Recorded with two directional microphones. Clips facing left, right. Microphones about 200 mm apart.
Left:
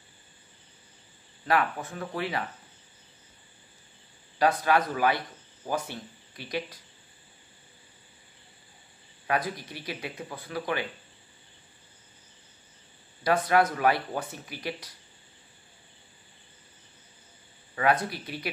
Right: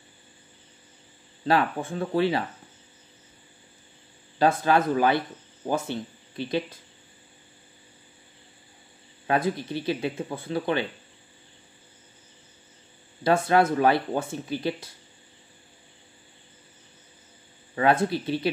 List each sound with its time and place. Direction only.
1.4 s speech: 30° right (ahead or behind)
4.4 s speech: 25° right (ahead or behind)
9.3 s speech: 30° right (ahead or behind)
13.2 s speech: 25° right (ahead or behind)
17.7 s speech: 25° right (ahead or behind)